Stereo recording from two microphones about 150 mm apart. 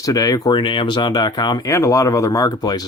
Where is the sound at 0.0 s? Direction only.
25° left (ahead or behind).